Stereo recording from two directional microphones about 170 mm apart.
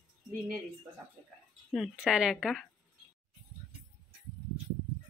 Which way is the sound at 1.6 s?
Centre (ahead or behind).